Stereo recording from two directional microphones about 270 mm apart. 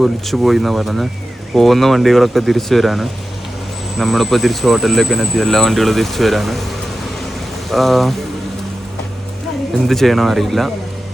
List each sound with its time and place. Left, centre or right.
0.0 s speech: centre
9.8 s speech: centre